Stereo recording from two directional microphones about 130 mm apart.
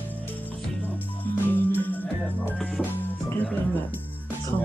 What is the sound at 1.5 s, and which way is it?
Music, 15° left (ahead or behind).